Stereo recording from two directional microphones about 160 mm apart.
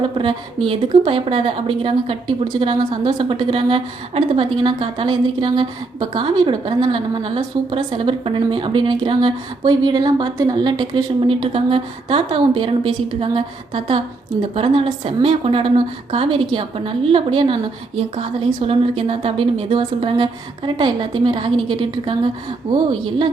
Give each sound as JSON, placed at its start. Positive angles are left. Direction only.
{"t": 0.0, "sound": "a woman's voice", "side_deg": -30}